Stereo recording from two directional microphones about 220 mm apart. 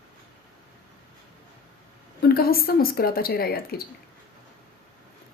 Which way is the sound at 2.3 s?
45° left (ahead or behind).